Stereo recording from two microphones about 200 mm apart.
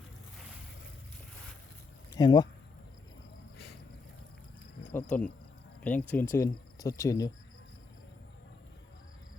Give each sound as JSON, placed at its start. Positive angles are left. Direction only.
{"t": 2.1, "sound": "speech", "side_deg": 20}
{"t": 5.1, "sound": "speech", "side_deg": 10}